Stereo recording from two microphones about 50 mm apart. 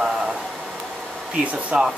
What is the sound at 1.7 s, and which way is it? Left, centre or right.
Speech, right.